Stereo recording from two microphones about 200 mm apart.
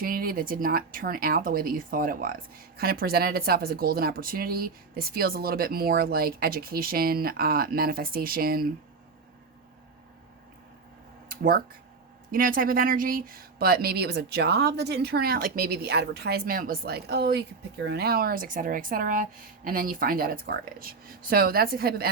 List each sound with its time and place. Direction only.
0.0 s speech: 45° right (ahead or behind)
11.3 s speech: 45° right (ahead or behind)